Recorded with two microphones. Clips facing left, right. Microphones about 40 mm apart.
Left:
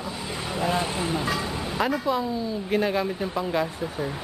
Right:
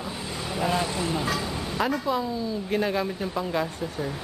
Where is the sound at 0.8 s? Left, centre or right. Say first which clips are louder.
Even; left.